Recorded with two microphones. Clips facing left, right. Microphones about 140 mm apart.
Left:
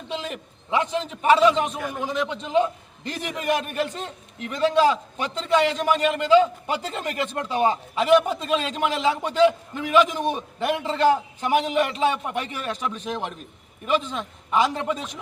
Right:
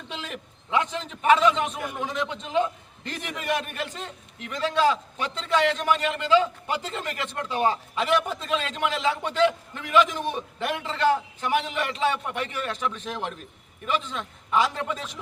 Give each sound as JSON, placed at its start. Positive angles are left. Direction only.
{"t": 0.3, "sound": "a man's voice", "side_deg": 25}
{"t": 3.4, "sound": "a man's voice", "side_deg": 20}